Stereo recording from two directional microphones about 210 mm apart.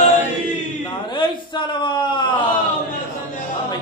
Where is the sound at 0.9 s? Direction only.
25° left (ahead or behind).